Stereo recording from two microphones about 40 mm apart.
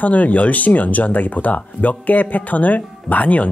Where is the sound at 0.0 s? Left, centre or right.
Left.